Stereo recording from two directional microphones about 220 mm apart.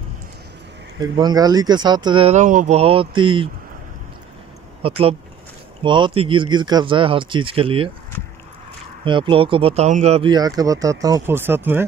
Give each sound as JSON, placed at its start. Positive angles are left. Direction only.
{"t": 0.9, "sound": "speech", "side_deg": -20}
{"t": 4.8, "sound": "speech", "side_deg": -25}
{"t": 9.0, "sound": "speech", "side_deg": -20}